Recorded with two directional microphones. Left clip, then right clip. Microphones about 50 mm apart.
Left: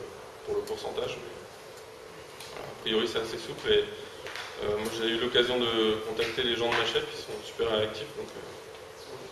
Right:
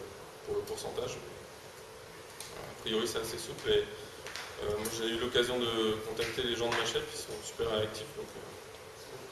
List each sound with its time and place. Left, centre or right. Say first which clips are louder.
0.7 s speech: left 4 dB; centre
2.8 s a man's voice: left 5 dB; centre